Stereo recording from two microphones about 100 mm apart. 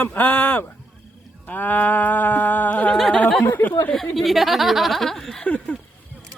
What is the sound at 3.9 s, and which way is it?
Speech, centre (ahead or behind).